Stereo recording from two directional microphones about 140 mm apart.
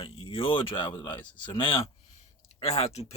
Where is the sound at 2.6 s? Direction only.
50° left (ahead or behind).